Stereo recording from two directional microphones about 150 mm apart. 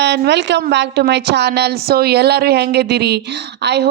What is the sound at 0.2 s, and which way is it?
A woman's voice, 90° right.